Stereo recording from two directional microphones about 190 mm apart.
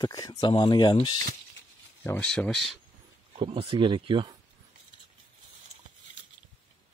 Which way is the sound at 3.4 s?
25° right (ahead or behind).